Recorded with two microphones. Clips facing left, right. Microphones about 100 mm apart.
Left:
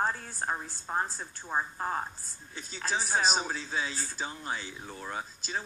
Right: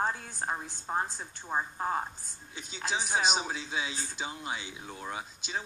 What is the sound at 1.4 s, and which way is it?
Speech, 5° right (ahead or behind).